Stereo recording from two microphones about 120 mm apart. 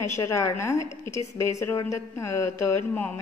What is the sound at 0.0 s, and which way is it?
A woman's voice, 25° left (ahead or behind).